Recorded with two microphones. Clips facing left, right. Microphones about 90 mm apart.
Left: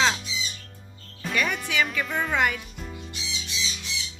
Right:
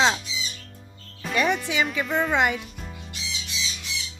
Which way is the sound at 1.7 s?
25° right (ahead or behind).